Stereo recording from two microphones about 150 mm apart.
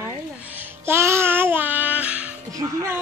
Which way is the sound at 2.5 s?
20° right (ahead or behind).